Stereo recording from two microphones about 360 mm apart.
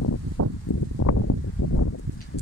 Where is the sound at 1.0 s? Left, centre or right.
Left.